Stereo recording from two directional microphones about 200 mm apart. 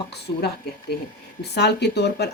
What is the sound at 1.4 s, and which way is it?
Speech, 55° left (ahead or behind).